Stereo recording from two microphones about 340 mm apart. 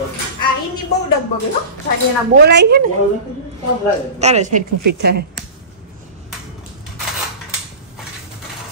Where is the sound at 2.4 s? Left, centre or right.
Right.